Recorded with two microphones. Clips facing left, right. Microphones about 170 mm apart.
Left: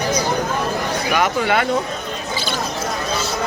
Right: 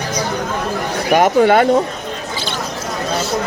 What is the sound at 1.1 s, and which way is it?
Speech, 45° right (ahead or behind).